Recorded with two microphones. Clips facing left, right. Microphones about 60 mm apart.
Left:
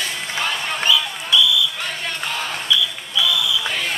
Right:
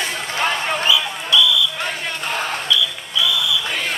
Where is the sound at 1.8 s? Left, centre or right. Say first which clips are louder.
Right 2 dB; right.